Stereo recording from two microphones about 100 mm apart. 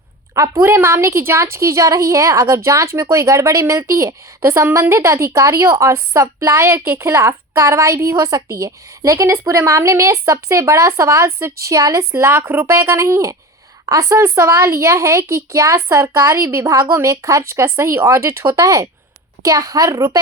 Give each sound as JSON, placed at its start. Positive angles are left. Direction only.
{"t": 0.3, "sound": "a woman's voice", "side_deg": -30}